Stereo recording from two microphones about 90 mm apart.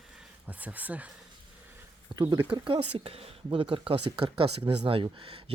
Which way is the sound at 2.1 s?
50° right (ahead or behind).